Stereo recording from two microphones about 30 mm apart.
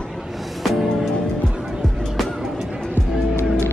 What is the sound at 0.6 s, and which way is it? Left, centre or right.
Music, centre.